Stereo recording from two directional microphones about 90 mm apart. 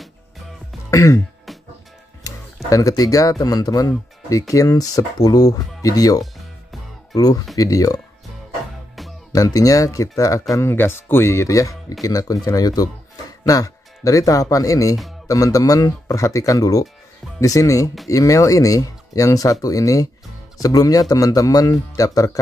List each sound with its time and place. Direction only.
0.8 s throat clearing: 40° left (ahead or behind)
2.2 s speech: 40° left (ahead or behind)
6.3 s music: centre (ahead or behind)
7.2 s speech: 45° left (ahead or behind)
9.3 s speech: 40° left (ahead or behind)